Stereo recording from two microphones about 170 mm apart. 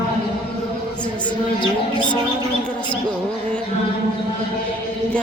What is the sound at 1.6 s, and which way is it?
Speech, 25° left (ahead or behind).